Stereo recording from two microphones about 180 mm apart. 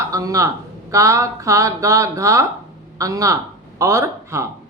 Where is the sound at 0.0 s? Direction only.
20° right (ahead or behind).